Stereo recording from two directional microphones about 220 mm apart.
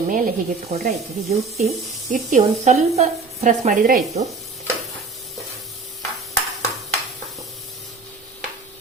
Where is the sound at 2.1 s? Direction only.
35° right (ahead or behind).